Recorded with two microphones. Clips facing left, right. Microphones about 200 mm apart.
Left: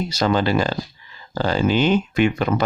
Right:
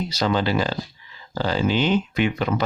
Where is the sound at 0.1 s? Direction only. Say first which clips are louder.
Left 3 dB; 50° left (ahead or behind).